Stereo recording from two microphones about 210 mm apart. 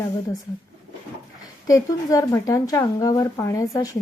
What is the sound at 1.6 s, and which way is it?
A woman's voice, 15° left (ahead or behind).